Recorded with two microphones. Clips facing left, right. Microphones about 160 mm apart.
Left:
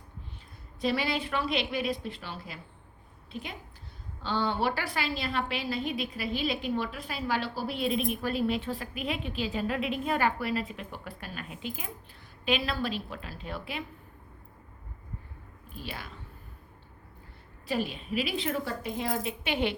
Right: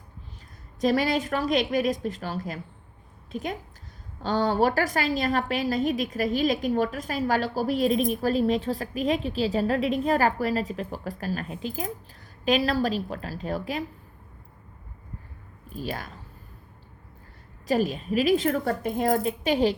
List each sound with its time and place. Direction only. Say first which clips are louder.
0.8 s a woman's voice: right 6 dB; 45° right (ahead or behind)
15.7 s a woman's voice: right 8 dB; 40° right (ahead or behind)
17.7 s a woman's voice: right 7 dB; 40° right (ahead or behind)